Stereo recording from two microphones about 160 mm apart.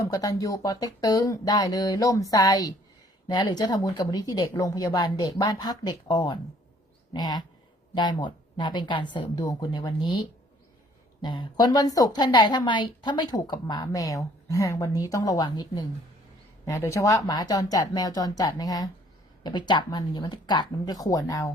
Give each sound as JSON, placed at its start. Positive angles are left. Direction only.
{"t": 0.0, "sound": "a woman's voice", "side_deg": 20}